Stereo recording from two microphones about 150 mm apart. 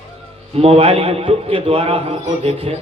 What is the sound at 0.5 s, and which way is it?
A man's voice, 40° right (ahead or behind).